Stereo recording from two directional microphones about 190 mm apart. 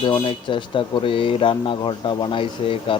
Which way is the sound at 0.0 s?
25° left (ahead or behind).